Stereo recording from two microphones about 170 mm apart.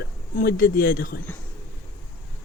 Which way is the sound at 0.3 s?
55° left (ahead or behind).